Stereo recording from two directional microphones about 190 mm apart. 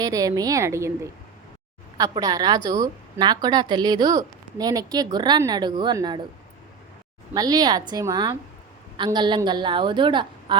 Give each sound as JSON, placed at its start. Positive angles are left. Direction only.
{"t": 0.0, "sound": "a woman's voice", "side_deg": -20}
{"t": 7.3, "sound": "speech", "side_deg": -20}